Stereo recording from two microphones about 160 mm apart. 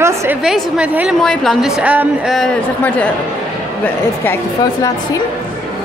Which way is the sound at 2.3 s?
5° left (ahead or behind).